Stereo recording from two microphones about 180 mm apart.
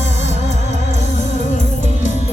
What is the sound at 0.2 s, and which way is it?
Music, 40° left (ahead or behind).